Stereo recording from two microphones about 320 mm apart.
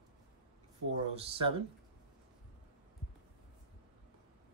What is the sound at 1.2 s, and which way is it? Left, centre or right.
Speech, centre.